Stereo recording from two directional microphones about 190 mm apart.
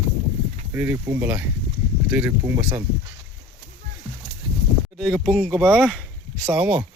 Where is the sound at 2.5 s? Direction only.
25° right (ahead or behind).